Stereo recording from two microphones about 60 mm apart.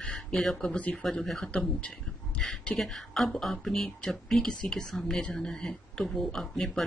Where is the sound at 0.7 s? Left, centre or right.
Left.